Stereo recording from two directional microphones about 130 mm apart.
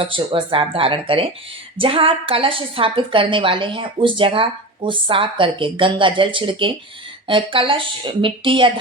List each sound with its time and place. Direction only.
0.0 s a woman's voice: 40° right (ahead or behind)